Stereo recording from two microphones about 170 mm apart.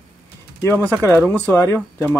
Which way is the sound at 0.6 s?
15° left (ahead or behind).